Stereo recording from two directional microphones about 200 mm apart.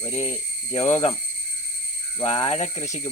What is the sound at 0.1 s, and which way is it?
Speech, 35° left (ahead or behind).